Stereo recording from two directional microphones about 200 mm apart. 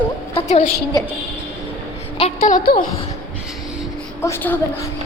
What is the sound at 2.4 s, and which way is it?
Speech, 45° left (ahead or behind).